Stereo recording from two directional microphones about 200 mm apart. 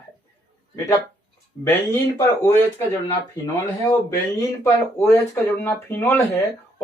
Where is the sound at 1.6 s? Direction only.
10° left (ahead or behind).